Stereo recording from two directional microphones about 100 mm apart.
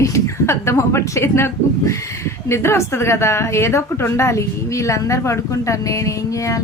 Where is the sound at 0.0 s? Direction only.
30° left (ahead or behind).